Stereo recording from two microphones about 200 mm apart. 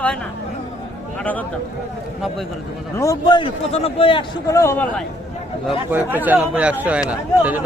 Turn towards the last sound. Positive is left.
turn(degrees=-5)  # may be behind; listen again after turning